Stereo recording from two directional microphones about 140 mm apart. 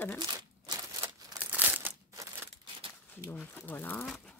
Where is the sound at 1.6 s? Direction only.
15° right (ahead or behind).